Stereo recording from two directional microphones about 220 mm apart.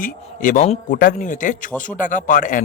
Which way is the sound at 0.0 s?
40° left (ahead or behind).